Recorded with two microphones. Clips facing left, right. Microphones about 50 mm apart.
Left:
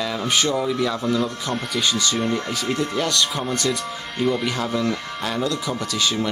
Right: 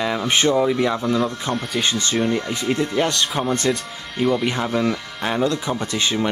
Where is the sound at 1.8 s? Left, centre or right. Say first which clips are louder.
Left 2 dB; right.